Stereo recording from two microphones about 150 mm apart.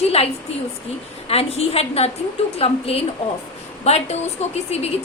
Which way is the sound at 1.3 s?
40° left (ahead or behind).